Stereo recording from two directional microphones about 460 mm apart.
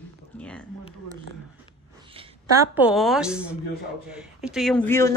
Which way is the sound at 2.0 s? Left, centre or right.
Centre.